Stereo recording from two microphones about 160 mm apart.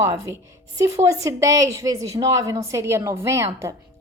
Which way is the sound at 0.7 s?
20° right (ahead or behind).